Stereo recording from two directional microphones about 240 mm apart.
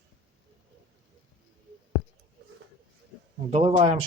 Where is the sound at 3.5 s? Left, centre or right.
Right.